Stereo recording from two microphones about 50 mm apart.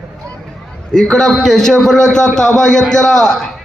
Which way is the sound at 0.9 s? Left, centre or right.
Centre.